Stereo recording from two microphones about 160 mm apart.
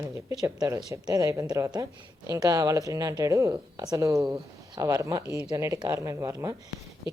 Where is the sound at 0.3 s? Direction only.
20° right (ahead or behind).